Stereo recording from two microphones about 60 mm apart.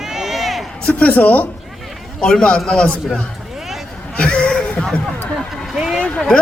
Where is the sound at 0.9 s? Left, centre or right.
Left.